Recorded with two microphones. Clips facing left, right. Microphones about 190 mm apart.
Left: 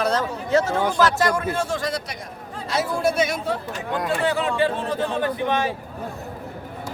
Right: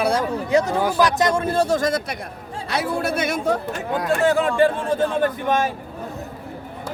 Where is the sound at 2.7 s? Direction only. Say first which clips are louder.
Left 1 dB; 60° right (ahead or behind).